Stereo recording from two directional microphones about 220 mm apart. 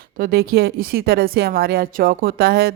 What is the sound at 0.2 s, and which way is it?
A woman's voice, 45° right (ahead or behind).